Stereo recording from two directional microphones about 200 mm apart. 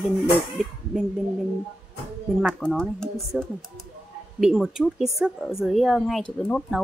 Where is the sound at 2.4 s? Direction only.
Centre (ahead or behind).